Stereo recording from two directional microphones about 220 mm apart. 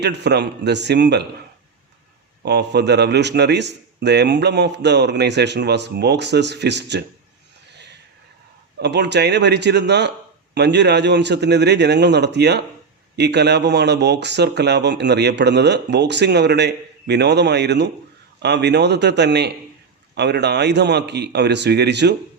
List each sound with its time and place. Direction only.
0.0 s speech: 50° right (ahead or behind)
2.4 s speech: 50° right (ahead or behind)
8.8 s speech: 50° right (ahead or behind)